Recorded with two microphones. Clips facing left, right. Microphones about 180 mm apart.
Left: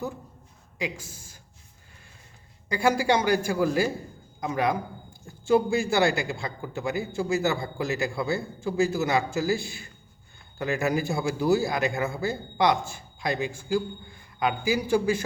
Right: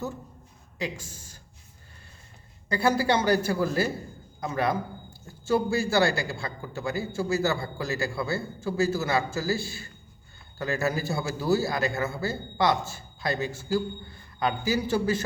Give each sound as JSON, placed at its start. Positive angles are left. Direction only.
{"t": 0.8, "sound": "a man's voice", "side_deg": 10}
{"t": 2.6, "sound": "a man's voice", "side_deg": 10}